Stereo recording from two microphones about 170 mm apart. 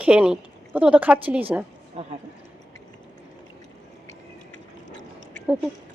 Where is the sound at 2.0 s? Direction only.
35° right (ahead or behind).